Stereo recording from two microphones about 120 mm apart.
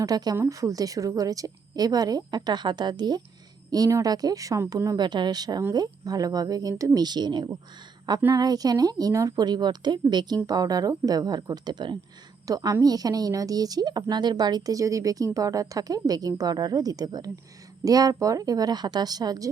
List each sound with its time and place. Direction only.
0.0 s a woman's voice: 30° right (ahead or behind)